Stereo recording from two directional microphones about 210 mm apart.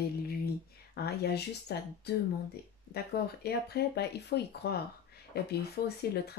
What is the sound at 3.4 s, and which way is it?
Speech, 50° left (ahead or behind).